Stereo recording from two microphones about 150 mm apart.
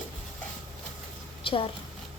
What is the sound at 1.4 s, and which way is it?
Speech, 35° left (ahead or behind).